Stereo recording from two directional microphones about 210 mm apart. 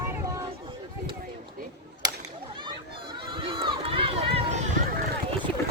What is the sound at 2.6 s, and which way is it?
Run, 20° right (ahead or behind).